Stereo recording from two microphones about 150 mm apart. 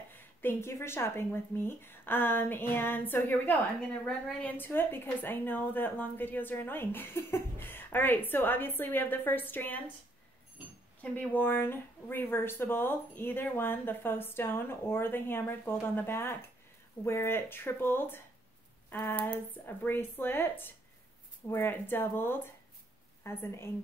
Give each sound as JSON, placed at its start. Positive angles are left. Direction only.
{"t": 0.1, "sound": "a woman's voice", "side_deg": 15}
{"t": 11.0, "sound": "a woman's voice", "side_deg": 10}